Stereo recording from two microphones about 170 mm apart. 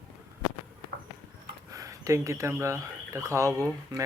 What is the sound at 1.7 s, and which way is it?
Speech, 20° right (ahead or behind).